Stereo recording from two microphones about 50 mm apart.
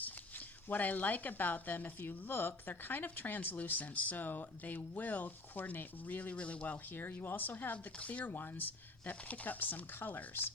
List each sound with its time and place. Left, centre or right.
0.0 s speech: left
6.3 s speech: left
6.9 s speech: left
8.3 s speech: left